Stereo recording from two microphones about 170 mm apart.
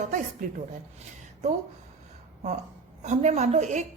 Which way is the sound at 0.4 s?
50° right (ahead or behind).